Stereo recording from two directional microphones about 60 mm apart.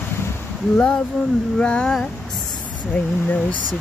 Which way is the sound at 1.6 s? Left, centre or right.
Centre.